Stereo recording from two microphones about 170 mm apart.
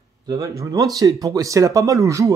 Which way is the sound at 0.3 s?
20° right (ahead or behind).